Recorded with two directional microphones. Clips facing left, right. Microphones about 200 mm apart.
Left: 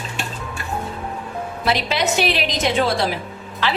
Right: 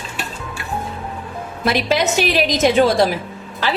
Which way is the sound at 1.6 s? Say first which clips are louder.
Right 4 dB; 45° right (ahead or behind).